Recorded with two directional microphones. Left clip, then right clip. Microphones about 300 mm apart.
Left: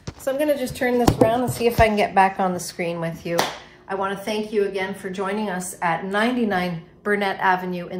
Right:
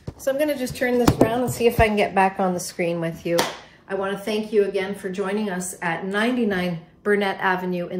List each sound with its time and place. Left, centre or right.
0.2 s a woman's voice: centre